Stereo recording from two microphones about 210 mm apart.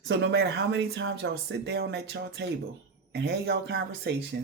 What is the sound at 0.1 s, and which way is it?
Speech, 55° right (ahead or behind).